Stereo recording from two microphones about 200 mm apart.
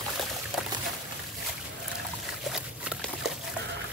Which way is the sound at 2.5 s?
Centre (ahead or behind).